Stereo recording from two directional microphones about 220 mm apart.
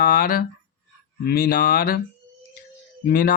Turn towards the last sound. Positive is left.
turn(degrees=40)  # may be behind; listen again after turning